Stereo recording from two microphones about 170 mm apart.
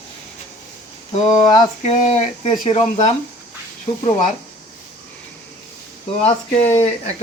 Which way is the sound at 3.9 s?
40° left (ahead or behind).